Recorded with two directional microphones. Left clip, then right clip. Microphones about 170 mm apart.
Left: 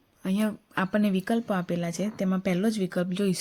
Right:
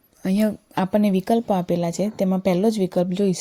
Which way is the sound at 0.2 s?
30° right (ahead or behind).